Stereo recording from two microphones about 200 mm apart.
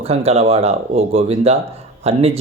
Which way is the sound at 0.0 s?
30° right (ahead or behind).